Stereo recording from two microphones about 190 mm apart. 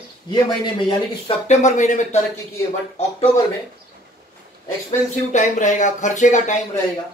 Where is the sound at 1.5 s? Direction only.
35° left (ahead or behind).